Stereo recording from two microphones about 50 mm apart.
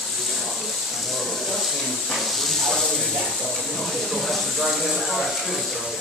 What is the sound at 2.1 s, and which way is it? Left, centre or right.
Hiss, centre.